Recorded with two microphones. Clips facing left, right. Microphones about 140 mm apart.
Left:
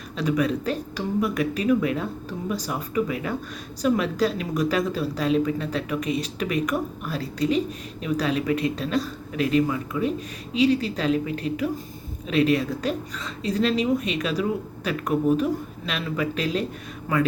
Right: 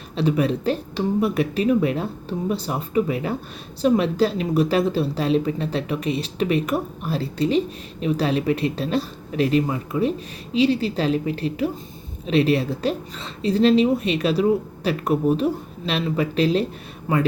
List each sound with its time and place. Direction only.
0.2 s a woman's voice: 30° right (ahead or behind)